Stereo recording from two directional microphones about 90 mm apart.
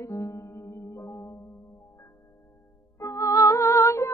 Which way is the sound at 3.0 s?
40° left (ahead or behind).